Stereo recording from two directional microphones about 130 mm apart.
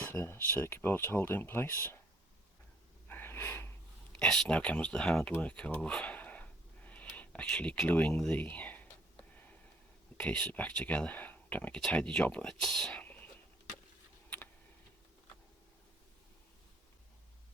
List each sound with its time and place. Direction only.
0.0 s speech: 15° left (ahead or behind)
3.1 s gasp: 15° left (ahead or behind)
4.1 s speech: 5° left (ahead or behind)
10.2 s speech: 10° left (ahead or behind)